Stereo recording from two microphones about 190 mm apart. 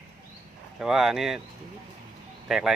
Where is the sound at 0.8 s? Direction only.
5° right (ahead or behind).